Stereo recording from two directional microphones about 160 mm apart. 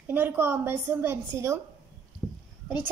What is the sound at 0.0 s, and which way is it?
A woman's voice, 10° right (ahead or behind).